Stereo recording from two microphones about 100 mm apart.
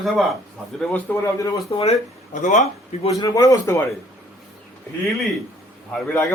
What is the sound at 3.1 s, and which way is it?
Speech, 40° left (ahead or behind).